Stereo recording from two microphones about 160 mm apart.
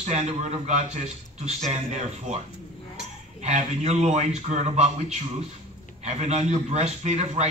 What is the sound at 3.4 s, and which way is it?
A man's voice, 45° right (ahead or behind).